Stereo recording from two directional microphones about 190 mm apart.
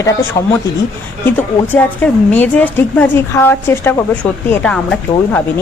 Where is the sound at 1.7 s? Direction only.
10° left (ahead or behind).